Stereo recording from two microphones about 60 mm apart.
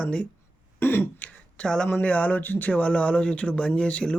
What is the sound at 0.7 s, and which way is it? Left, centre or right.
Throat clearing, left.